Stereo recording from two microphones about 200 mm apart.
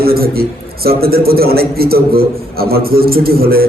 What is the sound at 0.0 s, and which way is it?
A man's voice, 50° right (ahead or behind).